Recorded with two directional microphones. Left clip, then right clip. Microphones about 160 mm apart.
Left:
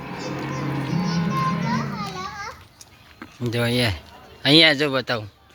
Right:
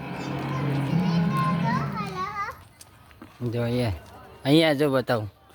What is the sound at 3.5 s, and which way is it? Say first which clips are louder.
Speech: left 5 dB; 5° left (ahead or behind).